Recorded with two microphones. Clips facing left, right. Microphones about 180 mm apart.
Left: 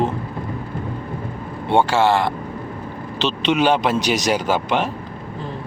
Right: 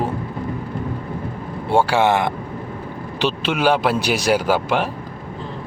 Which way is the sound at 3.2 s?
5° right (ahead or behind).